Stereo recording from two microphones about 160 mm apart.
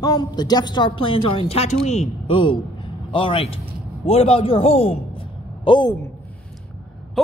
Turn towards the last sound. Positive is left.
turn(degrees=30)  # may be behind; listen again after turning